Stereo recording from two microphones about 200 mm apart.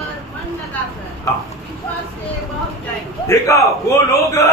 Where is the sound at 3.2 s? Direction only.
15° left (ahead or behind).